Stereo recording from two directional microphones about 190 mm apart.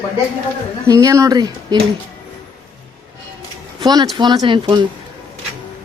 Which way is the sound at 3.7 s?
20° right (ahead or behind).